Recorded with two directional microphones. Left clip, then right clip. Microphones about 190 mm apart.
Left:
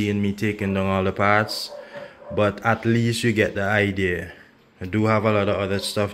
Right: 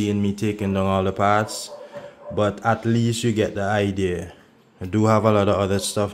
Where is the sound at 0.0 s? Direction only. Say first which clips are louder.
Even; centre (ahead or behind); by 5.9 s 20° right (ahead or behind).